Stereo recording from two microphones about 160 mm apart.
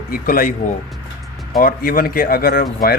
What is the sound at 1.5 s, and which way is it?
Speech, 65° left (ahead or behind).